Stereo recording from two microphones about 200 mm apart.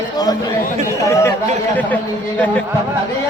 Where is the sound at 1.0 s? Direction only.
15° left (ahead or behind).